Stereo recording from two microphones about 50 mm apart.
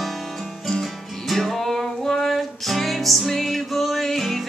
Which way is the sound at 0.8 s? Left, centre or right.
Centre.